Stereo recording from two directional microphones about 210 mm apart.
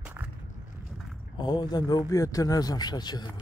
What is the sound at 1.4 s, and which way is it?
Speech, 20° left (ahead or behind).